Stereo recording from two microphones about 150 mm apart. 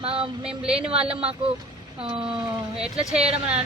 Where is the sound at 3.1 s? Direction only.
45° right (ahead or behind).